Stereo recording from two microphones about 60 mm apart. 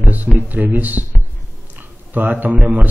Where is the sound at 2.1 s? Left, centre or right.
Right.